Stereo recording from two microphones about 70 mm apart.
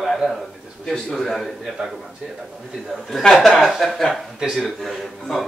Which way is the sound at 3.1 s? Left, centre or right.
Centre.